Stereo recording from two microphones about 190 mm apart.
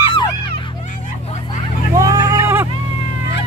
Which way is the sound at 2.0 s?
20° right (ahead or behind).